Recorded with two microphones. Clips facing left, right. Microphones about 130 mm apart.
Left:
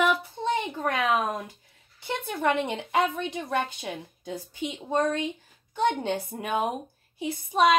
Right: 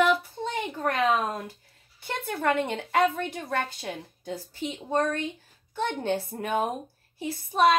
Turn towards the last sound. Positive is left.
turn(degrees=20)  # may be behind; listen again after turning